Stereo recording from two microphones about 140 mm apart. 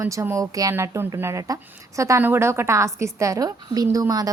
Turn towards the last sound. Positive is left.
turn(degrees=-25)  # may be behind; listen again after turning